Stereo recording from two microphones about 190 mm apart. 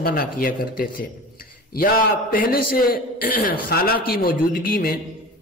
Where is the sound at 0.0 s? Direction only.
55° left (ahead or behind).